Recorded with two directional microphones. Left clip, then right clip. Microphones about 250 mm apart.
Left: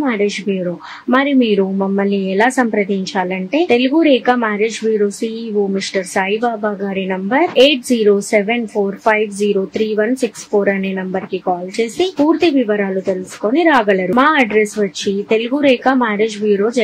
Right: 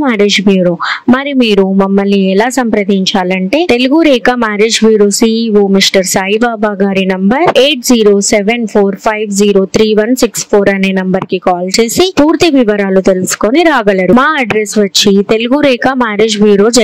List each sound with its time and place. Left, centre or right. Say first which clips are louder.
0.0 s speech: right 8 dB; right
11.8 s speech: right 7 dB; right